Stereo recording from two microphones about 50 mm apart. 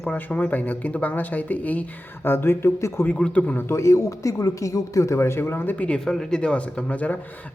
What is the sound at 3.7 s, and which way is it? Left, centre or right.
Speech, left.